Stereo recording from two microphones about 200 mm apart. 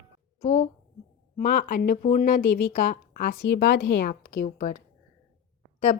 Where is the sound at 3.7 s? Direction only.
65° left (ahead or behind).